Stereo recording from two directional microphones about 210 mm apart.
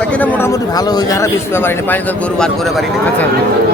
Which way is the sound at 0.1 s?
5° left (ahead or behind).